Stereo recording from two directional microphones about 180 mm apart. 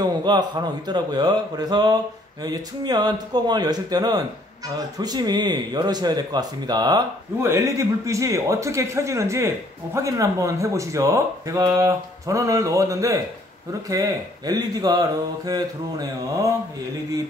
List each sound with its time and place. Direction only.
0.0 s speech: 25° right (ahead or behind)